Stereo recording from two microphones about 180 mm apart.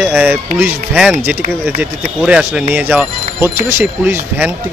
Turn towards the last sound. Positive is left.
turn(degrees=-10)  # may be behind; listen again after turning